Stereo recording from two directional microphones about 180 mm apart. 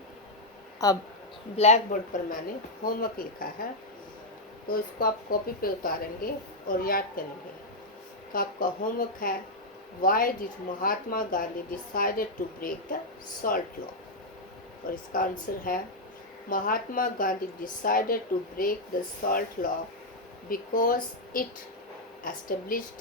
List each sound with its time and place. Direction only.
0.8 s speech: 20° left (ahead or behind)
1.5 s speech: 40° left (ahead or behind)
4.7 s speech: 55° left (ahead or behind)
8.3 s speech: 50° left (ahead or behind)
14.8 s speech: 50° left (ahead or behind)